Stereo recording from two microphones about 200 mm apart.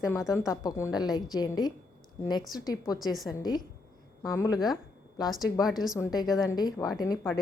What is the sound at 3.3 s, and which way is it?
A woman's voice, 20° left (ahead or behind).